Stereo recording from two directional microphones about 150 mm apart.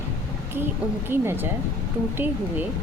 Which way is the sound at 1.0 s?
15° right (ahead or behind).